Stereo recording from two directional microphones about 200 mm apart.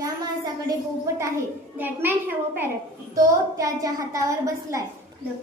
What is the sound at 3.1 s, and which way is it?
A woman's voice, 15° right (ahead or behind).